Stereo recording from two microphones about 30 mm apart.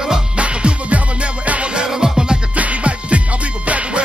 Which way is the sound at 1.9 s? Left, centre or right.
Centre.